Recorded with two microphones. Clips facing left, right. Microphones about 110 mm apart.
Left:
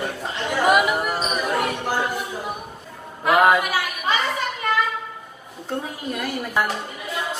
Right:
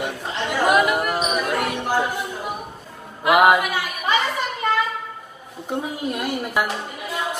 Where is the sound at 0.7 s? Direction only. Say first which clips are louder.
Even; centre (ahead or behind).